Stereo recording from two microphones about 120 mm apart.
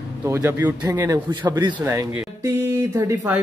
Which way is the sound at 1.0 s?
35° right (ahead or behind).